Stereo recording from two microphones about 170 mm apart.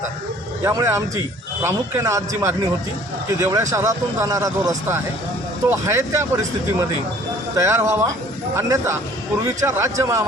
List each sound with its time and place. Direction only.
0.6 s a man's voice: 20° right (ahead or behind)